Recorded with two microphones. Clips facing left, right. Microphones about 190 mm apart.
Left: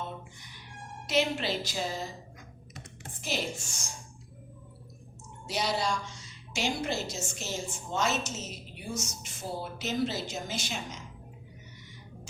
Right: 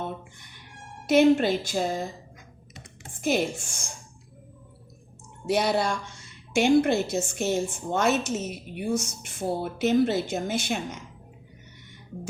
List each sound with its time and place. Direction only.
0.0 s a sound: 55° right (ahead or behind)
1.0 s a woman's voice: 50° right (ahead or behind)
3.2 s a woman's voice: 50° right (ahead or behind)
5.5 s a woman's voice: 55° right (ahead or behind)